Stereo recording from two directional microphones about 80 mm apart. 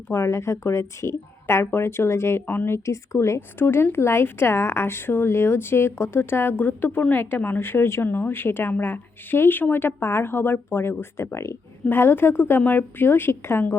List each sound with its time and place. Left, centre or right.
0.1 s speech: left